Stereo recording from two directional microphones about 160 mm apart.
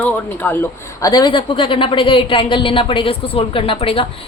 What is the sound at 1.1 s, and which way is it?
A woman's voice, 30° left (ahead or behind).